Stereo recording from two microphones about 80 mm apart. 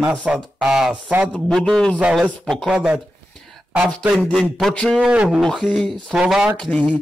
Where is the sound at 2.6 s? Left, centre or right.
Centre.